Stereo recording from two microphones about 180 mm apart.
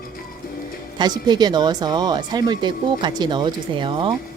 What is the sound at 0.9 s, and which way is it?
Speech, 25° right (ahead or behind).